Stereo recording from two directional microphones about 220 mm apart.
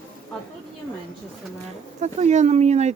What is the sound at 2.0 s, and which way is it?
Speech, 30° right (ahead or behind).